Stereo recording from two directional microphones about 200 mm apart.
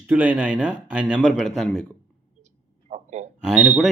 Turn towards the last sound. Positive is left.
turn(degrees=-5)  # may be behind; listen again after turning